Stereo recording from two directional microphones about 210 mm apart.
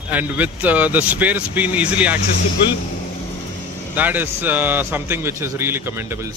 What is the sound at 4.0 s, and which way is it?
A man's voice, 10° right (ahead or behind).